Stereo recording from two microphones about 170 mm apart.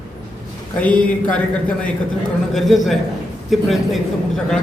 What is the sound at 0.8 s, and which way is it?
A man's voice, 10° left (ahead or behind).